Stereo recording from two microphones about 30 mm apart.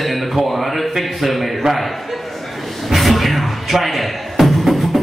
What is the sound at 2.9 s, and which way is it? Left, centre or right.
Music, centre.